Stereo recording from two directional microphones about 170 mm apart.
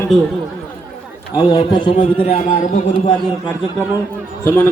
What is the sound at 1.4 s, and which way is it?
A man's voice, 30° left (ahead or behind).